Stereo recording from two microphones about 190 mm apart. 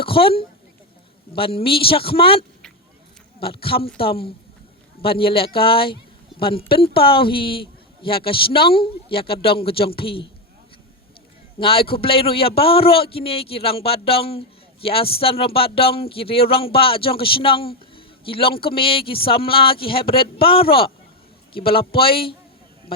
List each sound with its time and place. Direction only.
0.0 s a woman's voice: 30° left (ahead or behind)
3.4 s a man's voice: 30° left (ahead or behind)
11.6 s a man's voice: 30° left (ahead or behind)